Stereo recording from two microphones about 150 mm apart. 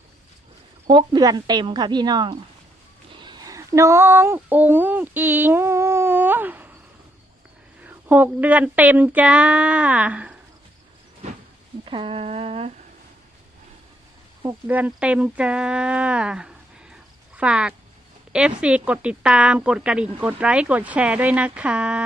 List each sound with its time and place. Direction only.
0.9 s a woman's voice: 30° right (ahead or behind)
3.1 s a sound: 30° right (ahead or behind); by 6.7 s 10° right (ahead or behind)
7.9 s speech: 15° right (ahead or behind)
11.9 s speech: 35° right (ahead or behind)
14.4 s speech: 10° right (ahead or behind)